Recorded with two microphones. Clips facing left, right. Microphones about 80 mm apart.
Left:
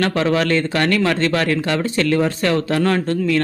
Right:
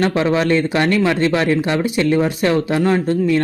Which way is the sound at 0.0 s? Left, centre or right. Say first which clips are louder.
Right 1 dB; centre.